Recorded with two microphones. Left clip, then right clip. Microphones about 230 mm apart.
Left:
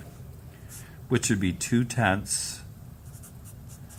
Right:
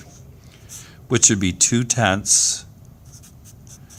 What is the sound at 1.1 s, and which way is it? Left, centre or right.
Speech, right.